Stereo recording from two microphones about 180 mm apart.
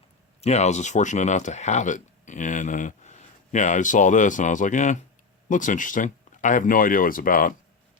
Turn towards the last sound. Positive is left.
turn(degrees=50)  # may be behind; listen again after turning